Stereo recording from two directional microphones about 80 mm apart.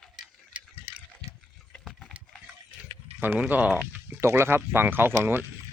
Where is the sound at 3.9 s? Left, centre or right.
Right.